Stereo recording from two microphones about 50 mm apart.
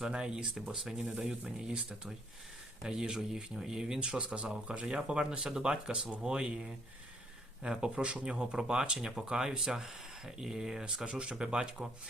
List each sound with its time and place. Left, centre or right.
0.1 s speech: centre
1.7 s speech: right
2.8 s speech: centre